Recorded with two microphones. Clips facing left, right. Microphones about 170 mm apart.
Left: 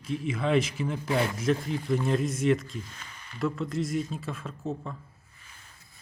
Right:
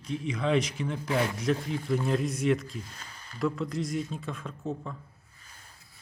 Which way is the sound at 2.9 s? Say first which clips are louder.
Even; 35° right (ahead or behind).